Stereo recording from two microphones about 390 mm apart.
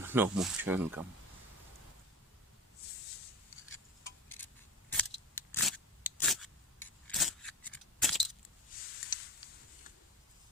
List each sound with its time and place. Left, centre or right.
0.0 s speech: centre
4.9 s scissors: centre
8.7 s a sound: left